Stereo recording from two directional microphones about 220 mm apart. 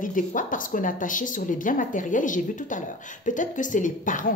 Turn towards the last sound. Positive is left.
turn(degrees=35)  # may be behind; listen again after turning